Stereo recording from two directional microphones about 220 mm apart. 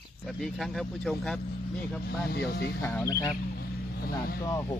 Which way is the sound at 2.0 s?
45° left (ahead or behind).